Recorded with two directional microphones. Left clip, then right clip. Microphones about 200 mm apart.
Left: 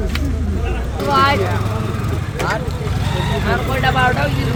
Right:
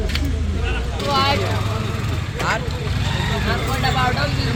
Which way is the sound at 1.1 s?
30° right (ahead or behind).